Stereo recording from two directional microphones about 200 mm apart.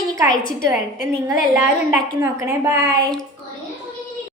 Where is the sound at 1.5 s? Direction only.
5° right (ahead or behind).